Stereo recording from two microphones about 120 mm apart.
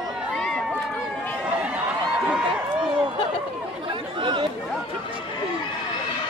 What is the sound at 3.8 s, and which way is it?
Chatter, 40° right (ahead or behind).